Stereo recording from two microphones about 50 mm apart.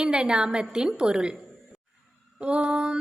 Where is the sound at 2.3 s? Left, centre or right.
Right.